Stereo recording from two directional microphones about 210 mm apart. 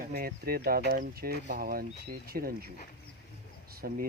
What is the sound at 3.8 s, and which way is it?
Speech, 50° right (ahead or behind).